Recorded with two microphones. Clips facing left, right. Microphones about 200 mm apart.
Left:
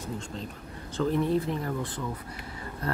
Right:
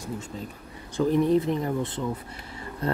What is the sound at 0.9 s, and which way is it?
Speech, 15° right (ahead or behind).